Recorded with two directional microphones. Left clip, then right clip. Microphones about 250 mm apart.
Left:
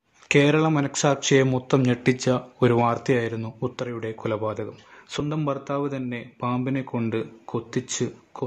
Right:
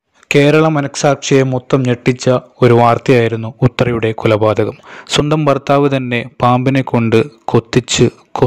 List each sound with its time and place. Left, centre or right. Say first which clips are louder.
0.3 s a man's voice: right 10 dB; right